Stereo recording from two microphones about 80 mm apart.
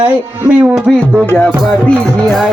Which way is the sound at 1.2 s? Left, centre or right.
Centre.